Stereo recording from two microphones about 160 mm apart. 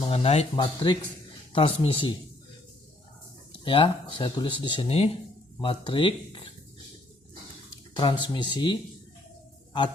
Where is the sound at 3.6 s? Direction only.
35° left (ahead or behind).